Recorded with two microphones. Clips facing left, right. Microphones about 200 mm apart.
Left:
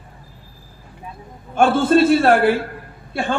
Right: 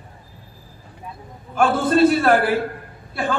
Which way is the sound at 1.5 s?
25° left (ahead or behind).